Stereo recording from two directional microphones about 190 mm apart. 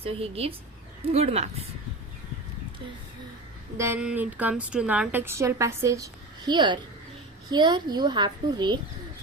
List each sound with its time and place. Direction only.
0.0 s a woman's voice: 30° right (ahead or behind)
3.8 s a woman's voice: 10° right (ahead or behind)